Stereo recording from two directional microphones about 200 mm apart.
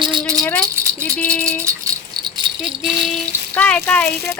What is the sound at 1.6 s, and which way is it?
Rattle, 20° right (ahead or behind).